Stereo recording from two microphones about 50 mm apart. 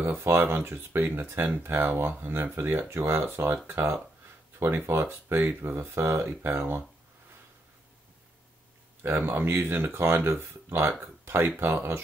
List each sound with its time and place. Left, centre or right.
0.0 s speech: right
3.6 s speech: right
9.0 s speech: right